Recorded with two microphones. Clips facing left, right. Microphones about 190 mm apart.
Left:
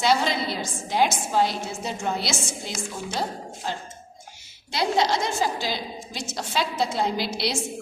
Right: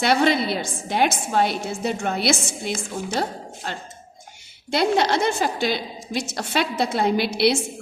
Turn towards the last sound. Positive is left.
turn(degrees=-60)  # may be behind; listen again after turning